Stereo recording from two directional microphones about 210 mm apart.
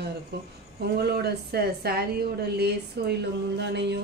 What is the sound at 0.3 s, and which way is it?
A woman's voice, 50° right (ahead or behind).